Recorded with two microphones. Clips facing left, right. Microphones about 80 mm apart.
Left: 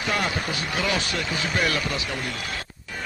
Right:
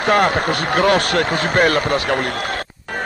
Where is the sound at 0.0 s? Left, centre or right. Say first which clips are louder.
Right 11 dB; right.